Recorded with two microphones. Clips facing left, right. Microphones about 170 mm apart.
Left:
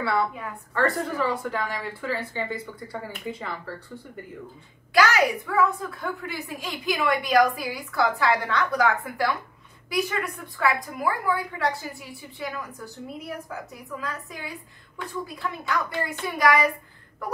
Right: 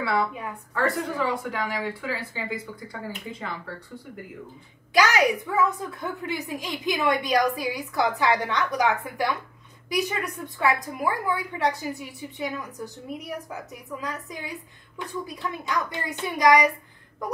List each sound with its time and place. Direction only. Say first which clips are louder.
0.7 s speech: left 1 dB; centre (ahead or behind)
4.9 s a woman's voice: even; 20° right (ahead or behind)
14.0 s a woman's voice: right 1 dB; 20° right (ahead or behind)